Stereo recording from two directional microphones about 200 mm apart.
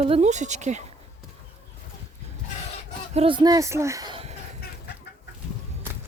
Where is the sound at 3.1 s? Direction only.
25° right (ahead or behind).